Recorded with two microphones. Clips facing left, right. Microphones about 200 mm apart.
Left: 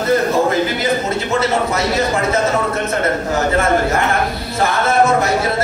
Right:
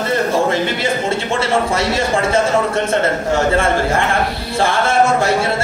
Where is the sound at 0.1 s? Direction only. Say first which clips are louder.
Left 2 dB; 30° right (ahead or behind).